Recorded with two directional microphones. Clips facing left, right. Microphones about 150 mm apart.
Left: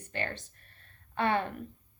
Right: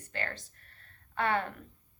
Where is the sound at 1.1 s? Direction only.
20° left (ahead or behind).